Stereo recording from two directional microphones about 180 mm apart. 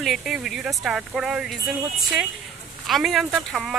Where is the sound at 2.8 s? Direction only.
Centre (ahead or behind).